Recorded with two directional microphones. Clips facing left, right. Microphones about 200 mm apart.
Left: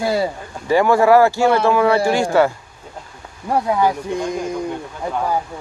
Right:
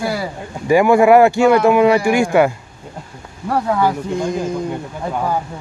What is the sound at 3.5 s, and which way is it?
Speech, 15° left (ahead or behind).